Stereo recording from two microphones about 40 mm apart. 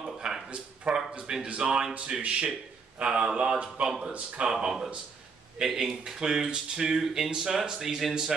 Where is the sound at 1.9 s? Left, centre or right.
Right.